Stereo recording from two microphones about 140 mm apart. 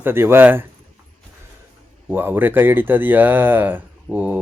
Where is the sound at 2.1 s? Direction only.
15° right (ahead or behind).